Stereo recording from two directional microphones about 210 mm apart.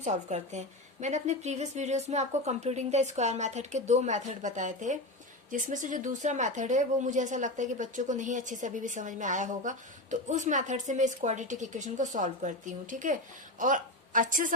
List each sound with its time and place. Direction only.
0.0 s a woman's voice: 35° right (ahead or behind)